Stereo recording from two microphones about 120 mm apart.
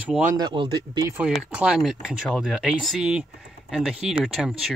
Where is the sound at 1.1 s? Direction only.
10° right (ahead or behind).